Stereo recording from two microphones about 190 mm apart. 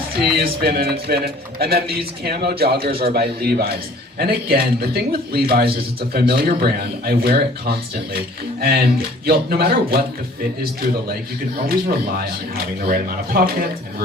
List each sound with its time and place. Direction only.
0.2 s a man's voice: 55° right (ahead or behind)